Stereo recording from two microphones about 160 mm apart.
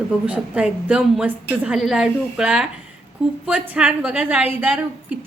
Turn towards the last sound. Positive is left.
turn(degrees=-10)  # may be behind; listen again after turning